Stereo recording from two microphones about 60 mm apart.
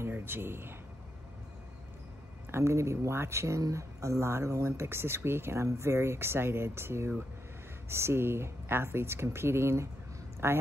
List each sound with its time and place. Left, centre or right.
0.0 s speech: right
2.5 s a woman's voice: right